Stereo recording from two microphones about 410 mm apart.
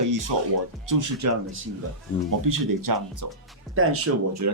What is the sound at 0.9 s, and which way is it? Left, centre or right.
Speech, right.